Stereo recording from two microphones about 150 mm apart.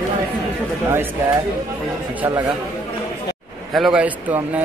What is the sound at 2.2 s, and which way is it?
Speech, 20° right (ahead or behind).